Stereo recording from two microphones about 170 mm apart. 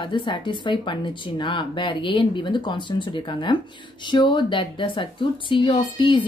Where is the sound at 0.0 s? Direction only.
30° left (ahead or behind).